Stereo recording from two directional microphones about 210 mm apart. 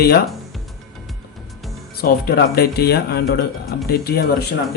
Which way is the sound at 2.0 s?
45° left (ahead or behind).